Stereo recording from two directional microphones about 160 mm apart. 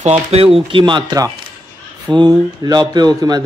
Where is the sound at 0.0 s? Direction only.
40° right (ahead or behind).